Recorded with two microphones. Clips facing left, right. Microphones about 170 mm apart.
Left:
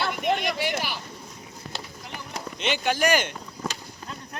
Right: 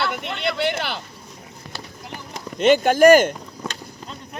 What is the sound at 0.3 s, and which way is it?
Speech, 70° right (ahead or behind).